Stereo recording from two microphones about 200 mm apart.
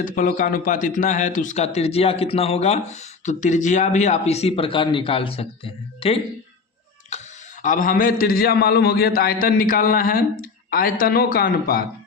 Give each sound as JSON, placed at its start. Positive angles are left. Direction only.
{"t": 0.0, "sound": "speech", "side_deg": 40}
{"t": 7.1, "sound": "a sound", "side_deg": 35}
{"t": 7.6, "sound": "a man's voice", "side_deg": 40}